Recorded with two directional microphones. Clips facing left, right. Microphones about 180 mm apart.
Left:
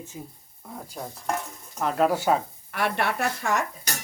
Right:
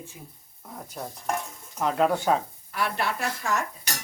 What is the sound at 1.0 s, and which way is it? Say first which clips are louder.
Stir: even; 5° left (ahead or behind).